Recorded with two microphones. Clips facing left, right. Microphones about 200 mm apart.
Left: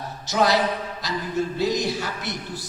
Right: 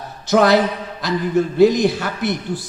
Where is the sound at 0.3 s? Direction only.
55° right (ahead or behind).